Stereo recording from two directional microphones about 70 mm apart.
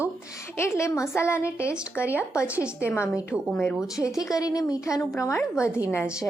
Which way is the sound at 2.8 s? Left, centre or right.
Left.